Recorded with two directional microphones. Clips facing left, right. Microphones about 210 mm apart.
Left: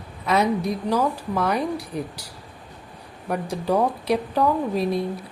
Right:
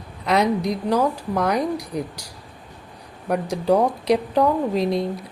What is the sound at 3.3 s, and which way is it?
Speech, 15° right (ahead or behind).